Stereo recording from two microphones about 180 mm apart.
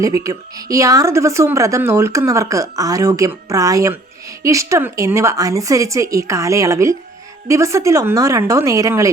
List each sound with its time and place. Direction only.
0.0 s a woman's voice: 20° right (ahead or behind)